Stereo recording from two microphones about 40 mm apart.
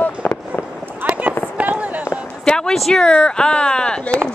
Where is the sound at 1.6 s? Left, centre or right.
Right.